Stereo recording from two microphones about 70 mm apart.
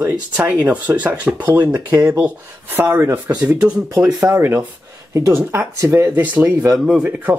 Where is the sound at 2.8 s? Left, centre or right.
Right.